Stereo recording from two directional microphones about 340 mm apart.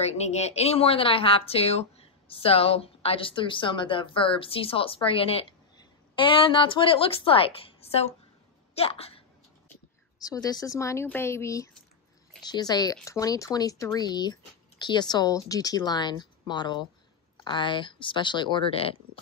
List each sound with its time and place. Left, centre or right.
0.0 s a woman's voice: centre